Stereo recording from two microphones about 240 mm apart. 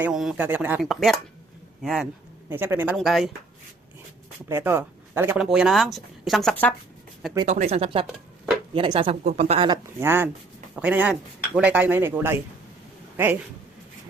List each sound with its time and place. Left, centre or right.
0.0 s speech: centre
4.4 s speech: centre
7.4 s speech: right; by 12.4 s centre